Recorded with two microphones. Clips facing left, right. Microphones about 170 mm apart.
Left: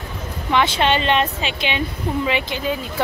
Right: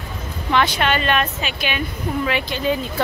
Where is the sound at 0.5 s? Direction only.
15° left (ahead or behind).